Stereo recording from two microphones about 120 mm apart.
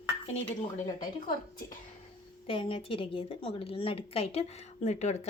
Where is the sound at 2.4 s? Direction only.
45° left (ahead or behind).